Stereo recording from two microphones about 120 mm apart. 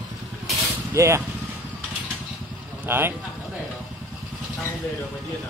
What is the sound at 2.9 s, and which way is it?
Speech, 20° right (ahead or behind).